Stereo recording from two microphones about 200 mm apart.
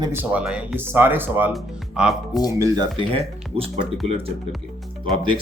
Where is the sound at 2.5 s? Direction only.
15° right (ahead or behind).